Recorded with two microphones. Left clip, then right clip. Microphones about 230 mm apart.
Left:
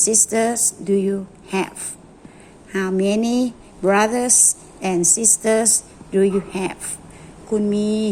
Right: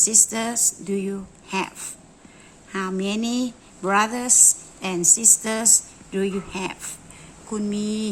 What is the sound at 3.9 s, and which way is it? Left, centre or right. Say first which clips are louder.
Speech: left 4 dB; centre.